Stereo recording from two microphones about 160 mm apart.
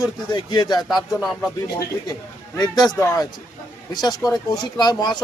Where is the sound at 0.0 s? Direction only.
25° left (ahead or behind).